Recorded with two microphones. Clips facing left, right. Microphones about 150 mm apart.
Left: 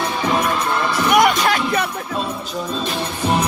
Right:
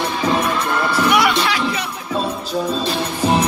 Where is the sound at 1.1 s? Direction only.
45° left (ahead or behind).